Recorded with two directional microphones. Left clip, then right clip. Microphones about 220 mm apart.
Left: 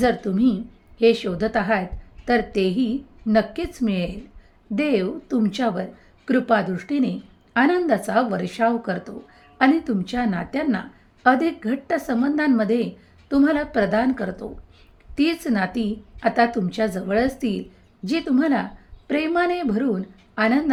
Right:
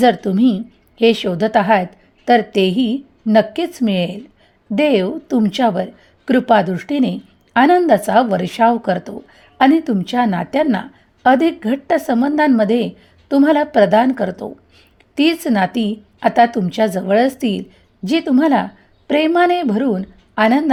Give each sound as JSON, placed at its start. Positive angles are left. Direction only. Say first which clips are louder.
{"t": 0.0, "sound": "a woman's voice", "louder": "right 7 dB", "side_deg": -35}